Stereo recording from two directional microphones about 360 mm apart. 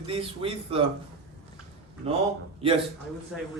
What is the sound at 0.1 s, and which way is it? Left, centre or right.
Speech, centre.